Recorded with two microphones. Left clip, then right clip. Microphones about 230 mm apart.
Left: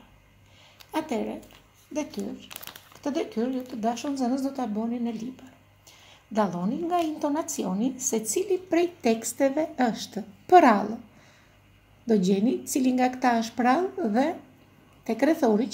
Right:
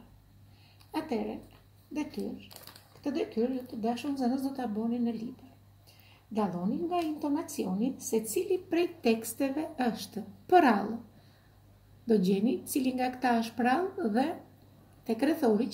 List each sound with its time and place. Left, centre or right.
0.9 s a sound: left
3.0 s a woman's voice: left
6.3 s a woman's voice: left
12.1 s a woman's voice: left